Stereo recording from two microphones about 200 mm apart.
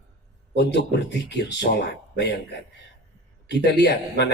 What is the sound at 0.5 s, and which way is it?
Speech, 60° left (ahead or behind).